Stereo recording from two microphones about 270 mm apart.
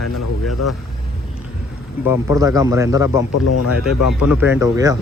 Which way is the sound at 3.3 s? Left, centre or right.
Left.